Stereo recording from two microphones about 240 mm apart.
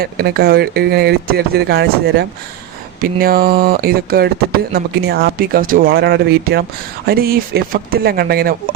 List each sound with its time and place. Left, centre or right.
0.0 s speech: right